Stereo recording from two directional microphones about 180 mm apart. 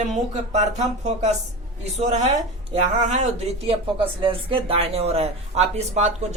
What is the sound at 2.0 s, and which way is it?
Speech, 40° right (ahead or behind).